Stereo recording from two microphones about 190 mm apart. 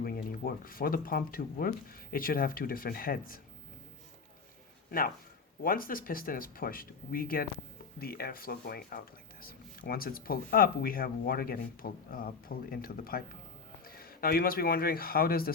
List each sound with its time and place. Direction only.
0.0 s speech: 50° left (ahead or behind)
4.9 s speech: 50° left (ahead or behind)